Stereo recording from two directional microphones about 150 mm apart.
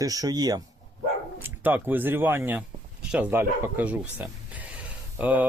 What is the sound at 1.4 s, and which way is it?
Speech, 10° right (ahead or behind).